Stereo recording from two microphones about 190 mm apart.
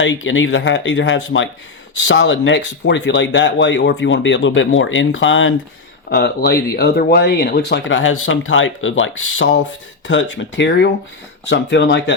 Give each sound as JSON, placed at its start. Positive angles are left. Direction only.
{"t": 0.0, "sound": "speech", "side_deg": 80}
{"t": 6.1, "sound": "speech", "side_deg": 60}